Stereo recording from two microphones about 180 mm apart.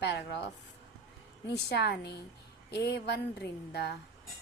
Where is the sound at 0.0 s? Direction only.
65° left (ahead or behind).